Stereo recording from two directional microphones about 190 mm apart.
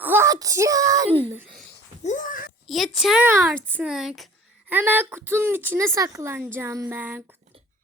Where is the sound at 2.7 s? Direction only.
Centre (ahead or behind).